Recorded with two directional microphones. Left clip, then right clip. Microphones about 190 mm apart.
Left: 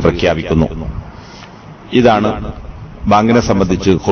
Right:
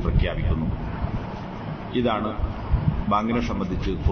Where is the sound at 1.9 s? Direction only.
55° left (ahead or behind).